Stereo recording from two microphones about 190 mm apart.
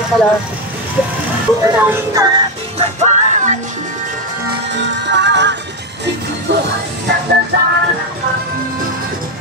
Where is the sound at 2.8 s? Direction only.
35° right (ahead or behind).